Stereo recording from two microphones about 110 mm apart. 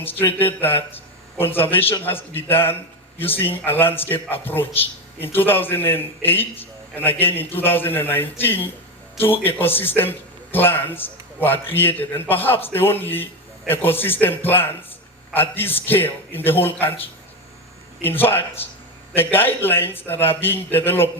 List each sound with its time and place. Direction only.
0.2 s a man's voice: 20° left (ahead or behind)